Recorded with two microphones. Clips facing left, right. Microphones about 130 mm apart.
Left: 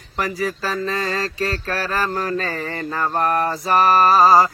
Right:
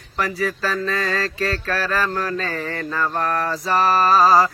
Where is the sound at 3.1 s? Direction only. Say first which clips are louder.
Left 3 dB; 25° left (ahead or behind).